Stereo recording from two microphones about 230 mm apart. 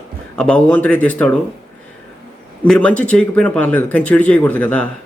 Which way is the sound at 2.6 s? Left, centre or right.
Centre.